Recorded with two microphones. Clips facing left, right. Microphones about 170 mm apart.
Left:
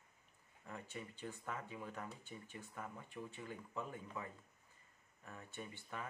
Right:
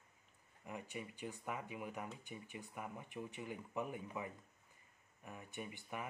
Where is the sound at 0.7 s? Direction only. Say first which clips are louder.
Right 2 dB; 15° right (ahead or behind).